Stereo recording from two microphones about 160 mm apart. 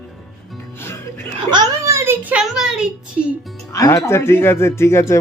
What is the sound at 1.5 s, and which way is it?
A child's voice, 20° right (ahead or behind).